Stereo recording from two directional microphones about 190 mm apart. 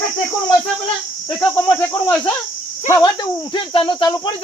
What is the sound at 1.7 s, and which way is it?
Cricket, 10° left (ahead or behind).